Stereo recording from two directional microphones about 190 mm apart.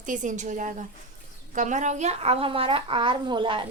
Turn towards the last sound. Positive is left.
turn(degrees=-25)  # may be behind; listen again after turning